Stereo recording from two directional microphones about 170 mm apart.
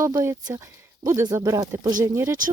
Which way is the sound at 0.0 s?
20° right (ahead or behind).